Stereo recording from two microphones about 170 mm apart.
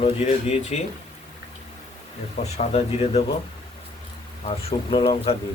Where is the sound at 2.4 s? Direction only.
40° left (ahead or behind).